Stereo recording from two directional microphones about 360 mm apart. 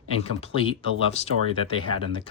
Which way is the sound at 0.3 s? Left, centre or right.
Centre.